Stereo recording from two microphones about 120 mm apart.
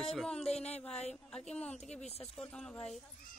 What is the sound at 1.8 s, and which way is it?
Speech, 70° left (ahead or behind).